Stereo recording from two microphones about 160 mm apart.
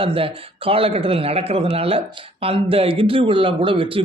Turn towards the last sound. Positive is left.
turn(degrees=-35)  # may be behind; listen again after turning